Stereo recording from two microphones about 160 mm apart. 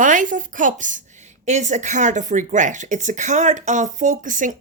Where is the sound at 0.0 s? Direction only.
55° right (ahead or behind).